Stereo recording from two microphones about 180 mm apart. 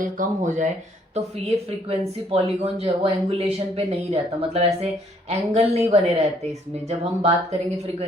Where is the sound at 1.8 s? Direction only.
35° right (ahead or behind).